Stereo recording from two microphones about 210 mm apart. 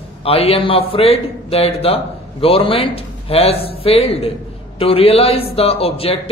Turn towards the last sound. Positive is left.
turn(degrees=25)  # may be behind; listen again after turning